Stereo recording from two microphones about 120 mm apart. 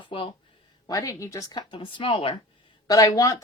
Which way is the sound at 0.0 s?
45° left (ahead or behind).